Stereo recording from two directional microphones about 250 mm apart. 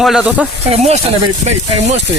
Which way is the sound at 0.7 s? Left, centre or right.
Right.